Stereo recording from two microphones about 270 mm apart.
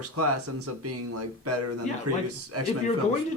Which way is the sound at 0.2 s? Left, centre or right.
Right.